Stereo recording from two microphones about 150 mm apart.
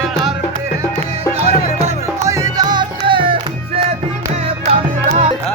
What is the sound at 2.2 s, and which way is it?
Music, 25° right (ahead or behind).